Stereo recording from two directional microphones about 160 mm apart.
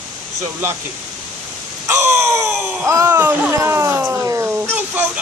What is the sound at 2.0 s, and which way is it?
Speech, 15° right (ahead or behind).